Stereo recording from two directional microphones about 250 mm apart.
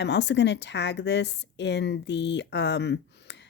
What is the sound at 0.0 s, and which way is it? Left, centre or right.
Speech, left.